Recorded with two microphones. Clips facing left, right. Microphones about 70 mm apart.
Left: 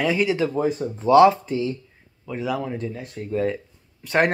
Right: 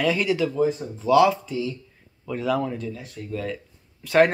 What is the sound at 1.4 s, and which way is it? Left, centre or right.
Speech, left.